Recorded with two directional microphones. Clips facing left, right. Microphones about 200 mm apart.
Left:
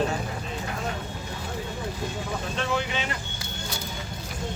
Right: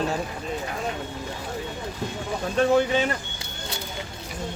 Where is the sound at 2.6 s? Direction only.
45° right (ahead or behind).